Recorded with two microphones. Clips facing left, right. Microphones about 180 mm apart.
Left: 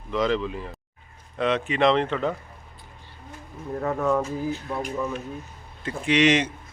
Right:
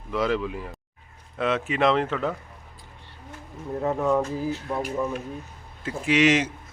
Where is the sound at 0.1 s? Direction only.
5° right (ahead or behind).